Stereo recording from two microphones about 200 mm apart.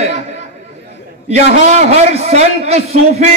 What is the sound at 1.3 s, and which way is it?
A man's voice, 35° right (ahead or behind).